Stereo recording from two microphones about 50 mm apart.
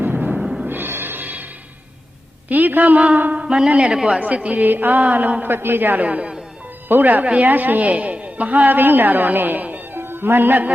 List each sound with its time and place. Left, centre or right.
0.0 s music: right
0.3 s music: centre
0.6 s music: right
2.5 s a woman's voice: right
3.3 s a man's voice: centre
4.2 s a woman's voice: right
4.6 s a woman's voice: right
6.1 s a woman's voice: right
6.8 s a woman's voice: right
10.0 s speech: right